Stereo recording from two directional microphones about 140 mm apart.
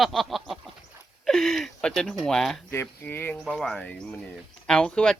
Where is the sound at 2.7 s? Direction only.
15° left (ahead or behind).